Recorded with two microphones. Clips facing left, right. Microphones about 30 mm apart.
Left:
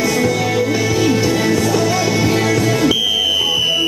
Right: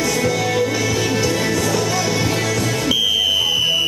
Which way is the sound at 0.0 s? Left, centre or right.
Centre.